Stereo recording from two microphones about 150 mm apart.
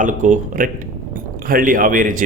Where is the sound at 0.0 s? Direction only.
55° right (ahead or behind).